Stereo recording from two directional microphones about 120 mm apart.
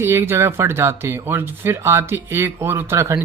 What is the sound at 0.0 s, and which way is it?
Speech, 20° right (ahead or behind).